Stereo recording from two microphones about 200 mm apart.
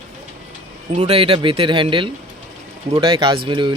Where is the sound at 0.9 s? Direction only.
30° right (ahead or behind).